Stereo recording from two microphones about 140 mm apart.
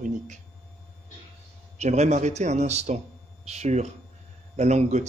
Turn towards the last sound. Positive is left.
turn(degrees=-55)  # may be behind; listen again after turning